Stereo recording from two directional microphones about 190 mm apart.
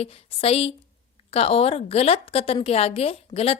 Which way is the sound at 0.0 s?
30° left (ahead or behind).